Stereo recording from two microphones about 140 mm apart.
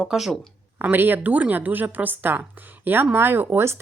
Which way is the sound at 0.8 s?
15° right (ahead or behind).